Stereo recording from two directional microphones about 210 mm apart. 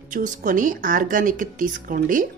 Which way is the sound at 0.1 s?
40° right (ahead or behind).